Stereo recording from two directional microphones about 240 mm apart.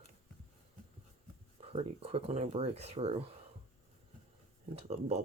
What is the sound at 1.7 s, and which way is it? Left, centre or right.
Speech, right.